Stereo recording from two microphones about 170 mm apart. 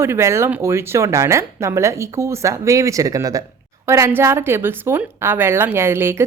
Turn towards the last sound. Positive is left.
turn(degrees=-15)  # may be behind; listen again after turning